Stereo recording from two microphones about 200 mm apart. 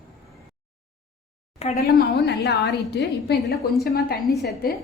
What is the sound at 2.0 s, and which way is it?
A woman's voice, 55° left (ahead or behind).